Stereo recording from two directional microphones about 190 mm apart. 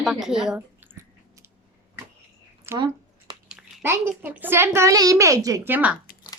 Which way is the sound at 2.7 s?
25° right (ahead or behind).